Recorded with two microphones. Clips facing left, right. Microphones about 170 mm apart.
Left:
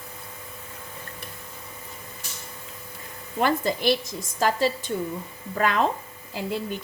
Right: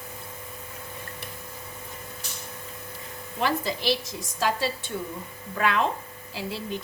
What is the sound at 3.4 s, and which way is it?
Speech, 50° left (ahead or behind).